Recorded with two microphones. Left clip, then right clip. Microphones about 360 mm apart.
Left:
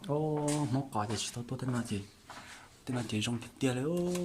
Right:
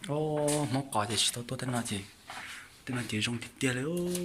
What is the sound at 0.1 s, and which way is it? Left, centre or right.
Speech, centre.